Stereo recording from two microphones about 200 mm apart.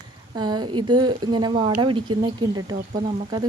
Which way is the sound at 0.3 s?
20° right (ahead or behind).